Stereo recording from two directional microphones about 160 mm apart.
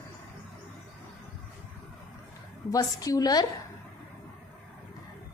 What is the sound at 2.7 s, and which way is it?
Speech, 20° left (ahead or behind).